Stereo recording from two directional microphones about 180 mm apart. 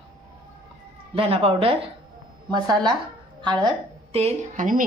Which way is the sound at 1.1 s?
30° right (ahead or behind).